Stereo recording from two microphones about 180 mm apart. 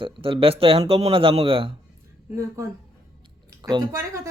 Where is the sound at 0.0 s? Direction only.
30° right (ahead or behind).